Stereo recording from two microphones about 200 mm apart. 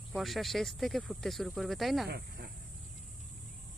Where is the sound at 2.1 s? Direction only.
50° right (ahead or behind).